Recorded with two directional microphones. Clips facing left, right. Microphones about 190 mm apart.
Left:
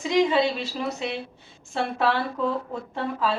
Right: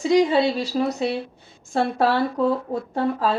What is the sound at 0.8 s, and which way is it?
A woman's voice, 40° right (ahead or behind).